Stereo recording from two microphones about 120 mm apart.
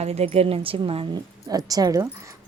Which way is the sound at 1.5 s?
30° right (ahead or behind).